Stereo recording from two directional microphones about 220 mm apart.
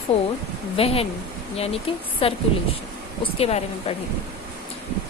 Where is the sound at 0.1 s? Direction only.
25° left (ahead or behind).